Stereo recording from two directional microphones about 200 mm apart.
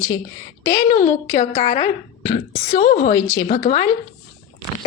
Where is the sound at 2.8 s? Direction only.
40° left (ahead or behind).